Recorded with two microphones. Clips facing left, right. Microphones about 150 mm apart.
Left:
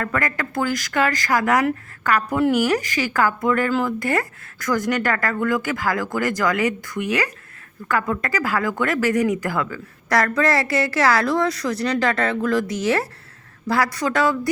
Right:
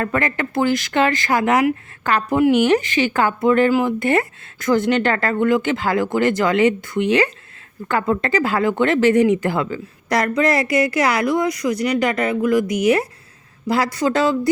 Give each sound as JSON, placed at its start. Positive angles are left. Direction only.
{"t": 0.0, "sound": "speech", "side_deg": -25}
{"t": 3.7, "sound": "speech", "side_deg": -15}
{"t": 4.0, "sound": "speech", "side_deg": -25}